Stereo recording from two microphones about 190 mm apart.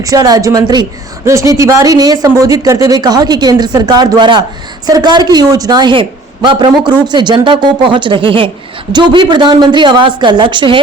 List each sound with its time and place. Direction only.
0.0 s speech: 20° right (ahead or behind)